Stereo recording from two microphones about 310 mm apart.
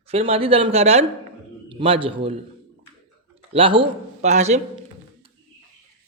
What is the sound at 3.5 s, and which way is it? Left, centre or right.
A man's voice, centre.